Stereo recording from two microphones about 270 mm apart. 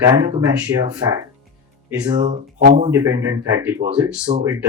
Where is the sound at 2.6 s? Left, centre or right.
Right.